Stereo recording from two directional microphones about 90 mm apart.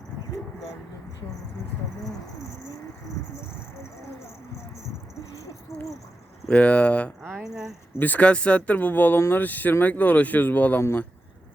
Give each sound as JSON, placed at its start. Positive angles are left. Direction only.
{"t": 6.5, "sound": "speech", "side_deg": 15}
{"t": 7.2, "sound": "cricket", "side_deg": -25}
{"t": 7.9, "sound": "speech", "side_deg": 20}